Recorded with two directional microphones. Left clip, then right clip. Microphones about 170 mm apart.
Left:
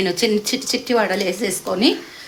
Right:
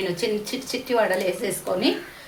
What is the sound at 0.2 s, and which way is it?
A woman's voice, 70° left (ahead or behind).